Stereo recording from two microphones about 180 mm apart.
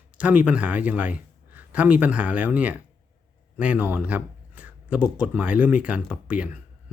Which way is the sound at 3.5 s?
10° right (ahead or behind).